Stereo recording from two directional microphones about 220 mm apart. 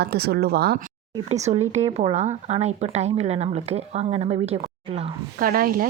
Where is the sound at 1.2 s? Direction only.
30° right (ahead or behind).